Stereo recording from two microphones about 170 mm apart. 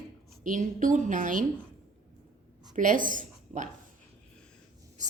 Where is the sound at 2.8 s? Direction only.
50° right (ahead or behind).